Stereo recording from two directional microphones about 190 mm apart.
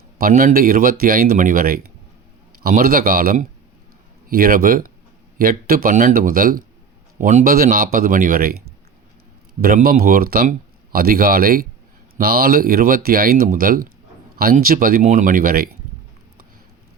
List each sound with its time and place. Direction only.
0.2 s speech: 50° right (ahead or behind)
9.6 s speech: 50° right (ahead or behind)